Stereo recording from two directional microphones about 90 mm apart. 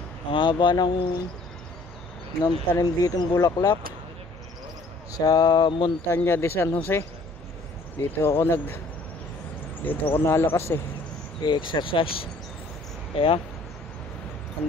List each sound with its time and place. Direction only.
0.3 s speech: 65° left (ahead or behind)
2.4 s speech: 40° left (ahead or behind)
5.1 s speech: 45° left (ahead or behind); by 5.9 s 65° left (ahead or behind)
6.0 s speech: 25° left (ahead or behind)
9.8 s speech: 20° left (ahead or behind)
11.4 s speech: 55° left (ahead or behind); by 13.4 s 90° left